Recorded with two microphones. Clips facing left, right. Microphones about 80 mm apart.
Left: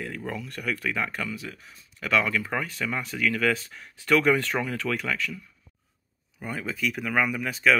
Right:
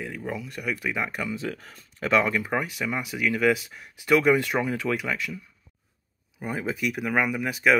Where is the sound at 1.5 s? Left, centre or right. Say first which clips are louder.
Right 7 dB; right.